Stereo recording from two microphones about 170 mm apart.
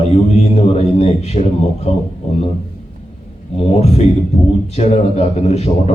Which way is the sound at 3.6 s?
40° left (ahead or behind).